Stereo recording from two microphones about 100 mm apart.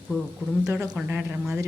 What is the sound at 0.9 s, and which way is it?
Speech, 20° right (ahead or behind).